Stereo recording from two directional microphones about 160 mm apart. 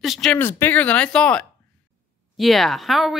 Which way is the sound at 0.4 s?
15° left (ahead or behind).